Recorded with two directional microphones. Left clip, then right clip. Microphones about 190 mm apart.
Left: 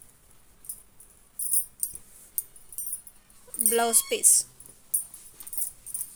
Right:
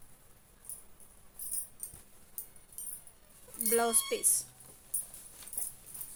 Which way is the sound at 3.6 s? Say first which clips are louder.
Left 5 dB; 25° left (ahead or behind).